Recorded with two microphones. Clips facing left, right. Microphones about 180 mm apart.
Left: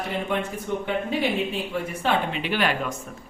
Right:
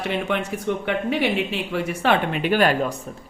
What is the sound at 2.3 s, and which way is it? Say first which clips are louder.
Speech: right 6 dB; 45° right (ahead or behind).